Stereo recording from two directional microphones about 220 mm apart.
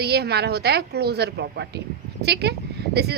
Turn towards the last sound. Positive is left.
turn(degrees=-45)  # may be behind; listen again after turning